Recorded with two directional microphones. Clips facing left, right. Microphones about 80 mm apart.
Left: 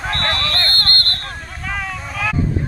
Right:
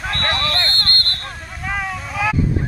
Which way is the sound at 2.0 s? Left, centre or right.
Centre.